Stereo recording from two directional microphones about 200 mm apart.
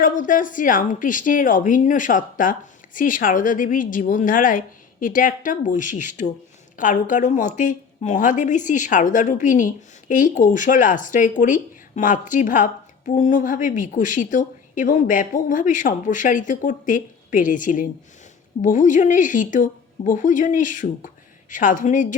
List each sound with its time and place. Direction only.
0.0 s a woman's voice: 40° left (ahead or behind)